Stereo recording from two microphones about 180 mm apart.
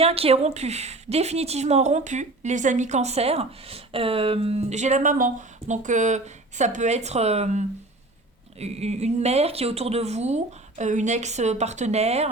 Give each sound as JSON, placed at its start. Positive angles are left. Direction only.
{"t": 0.0, "sound": "speech", "side_deg": -35}